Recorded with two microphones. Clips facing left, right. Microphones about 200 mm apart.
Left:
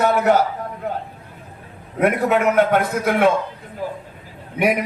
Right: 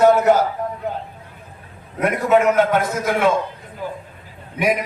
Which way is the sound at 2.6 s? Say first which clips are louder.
Left 1 dB; 60° left (ahead or behind).